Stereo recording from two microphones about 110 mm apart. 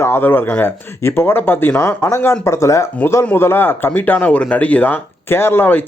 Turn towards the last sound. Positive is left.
turn(degrees=15)  # may be behind; listen again after turning